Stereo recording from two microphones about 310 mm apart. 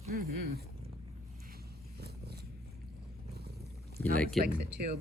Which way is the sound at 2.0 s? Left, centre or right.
Right.